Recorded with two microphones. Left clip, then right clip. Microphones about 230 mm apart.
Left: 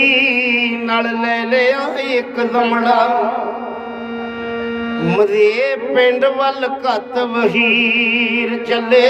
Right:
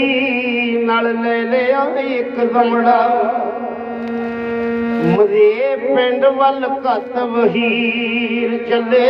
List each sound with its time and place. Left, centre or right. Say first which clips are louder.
0.0 s music: left 4 dB; left
5.1 s music: right 1 dB; left